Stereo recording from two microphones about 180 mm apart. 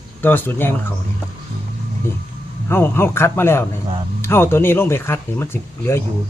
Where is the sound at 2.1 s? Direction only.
15° left (ahead or behind).